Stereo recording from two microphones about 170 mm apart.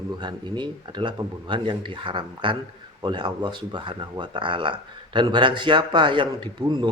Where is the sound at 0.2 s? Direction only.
25° right (ahead or behind).